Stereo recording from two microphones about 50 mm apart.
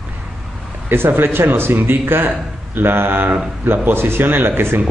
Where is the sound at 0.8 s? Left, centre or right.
Right.